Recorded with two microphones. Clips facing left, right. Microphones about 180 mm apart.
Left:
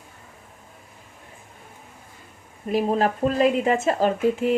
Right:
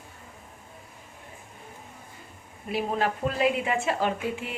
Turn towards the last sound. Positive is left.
turn(degrees=40)  # may be behind; listen again after turning